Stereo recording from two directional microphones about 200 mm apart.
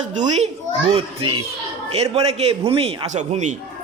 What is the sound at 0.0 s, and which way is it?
Speech, 35° right (ahead or behind).